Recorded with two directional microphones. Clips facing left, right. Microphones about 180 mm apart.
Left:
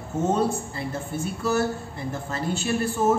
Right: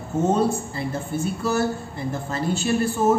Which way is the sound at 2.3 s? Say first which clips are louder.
Right 3 dB; 35° right (ahead or behind).